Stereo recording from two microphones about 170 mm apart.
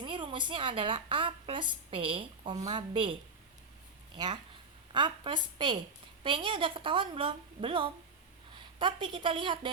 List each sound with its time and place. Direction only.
0.0 s a woman's voice: 30° right (ahead or behind)
4.9 s a woman's voice: 30° right (ahead or behind)